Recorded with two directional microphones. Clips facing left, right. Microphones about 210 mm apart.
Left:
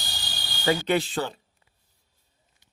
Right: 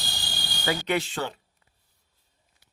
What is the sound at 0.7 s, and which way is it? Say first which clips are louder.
Speech: left 4 dB; 30° left (ahead or behind).